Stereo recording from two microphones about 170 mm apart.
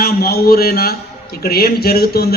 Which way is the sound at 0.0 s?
65° left (ahead or behind).